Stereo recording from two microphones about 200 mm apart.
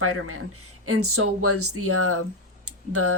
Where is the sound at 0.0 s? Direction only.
90° right.